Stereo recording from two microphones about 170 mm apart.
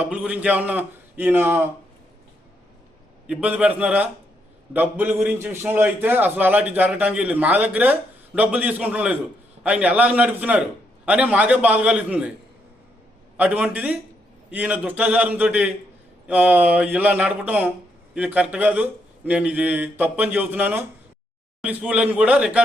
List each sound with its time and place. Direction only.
0.0 s a man's voice: 10° right (ahead or behind)
3.2 s a man's voice: 10° right (ahead or behind)
13.3 s a man's voice: 10° right (ahead or behind)